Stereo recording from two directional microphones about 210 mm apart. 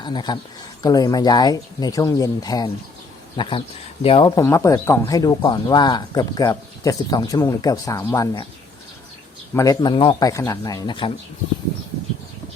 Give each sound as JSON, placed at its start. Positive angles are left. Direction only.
{"t": 0.0, "sound": "speech", "side_deg": 20}
{"t": 4.0, "sound": "speech", "side_deg": 25}
{"t": 9.6, "sound": "speech", "side_deg": 20}